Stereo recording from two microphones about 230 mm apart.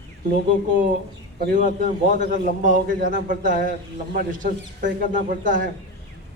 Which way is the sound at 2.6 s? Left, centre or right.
Right.